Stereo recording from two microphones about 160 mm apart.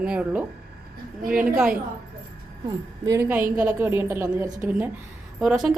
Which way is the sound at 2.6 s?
20° right (ahead or behind).